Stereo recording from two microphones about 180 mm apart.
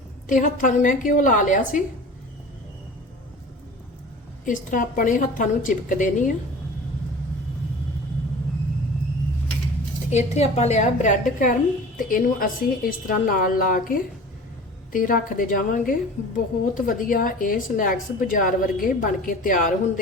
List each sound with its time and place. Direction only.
0.3 s a woman's voice: 45° left (ahead or behind)
4.4 s a woman's voice: 45° left (ahead or behind)
10.1 s a woman's voice: 40° left (ahead or behind)